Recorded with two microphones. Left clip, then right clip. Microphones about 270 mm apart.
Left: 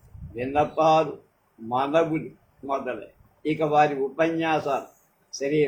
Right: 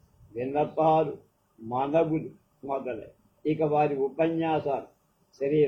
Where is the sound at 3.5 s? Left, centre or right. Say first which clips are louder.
Left 4 dB; left.